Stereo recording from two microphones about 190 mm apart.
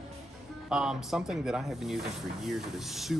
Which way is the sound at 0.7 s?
5° right (ahead or behind).